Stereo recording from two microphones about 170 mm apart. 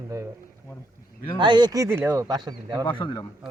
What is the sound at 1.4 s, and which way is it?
Speech, 25° right (ahead or behind).